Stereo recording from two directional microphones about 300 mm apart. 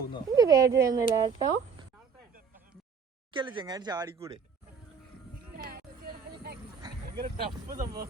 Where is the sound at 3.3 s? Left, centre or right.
Centre.